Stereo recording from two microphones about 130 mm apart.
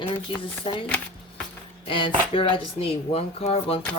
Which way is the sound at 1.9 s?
40° left (ahead or behind).